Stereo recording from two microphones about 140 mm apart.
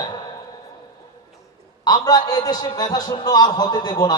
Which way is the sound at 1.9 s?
30° left (ahead or behind).